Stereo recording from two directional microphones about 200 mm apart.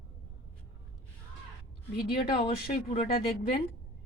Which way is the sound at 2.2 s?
25° left (ahead or behind).